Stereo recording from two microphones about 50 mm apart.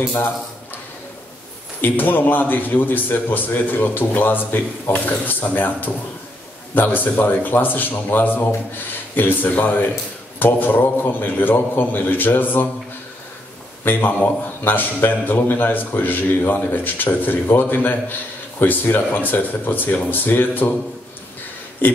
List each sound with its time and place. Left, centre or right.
1.8 s a man's voice: left
13.8 s a man's voice: left
21.8 s a man's voice: left